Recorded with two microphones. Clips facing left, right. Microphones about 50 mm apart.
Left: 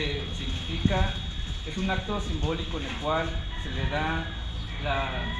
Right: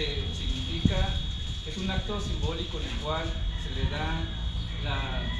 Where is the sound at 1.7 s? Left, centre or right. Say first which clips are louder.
Left 4 dB; left.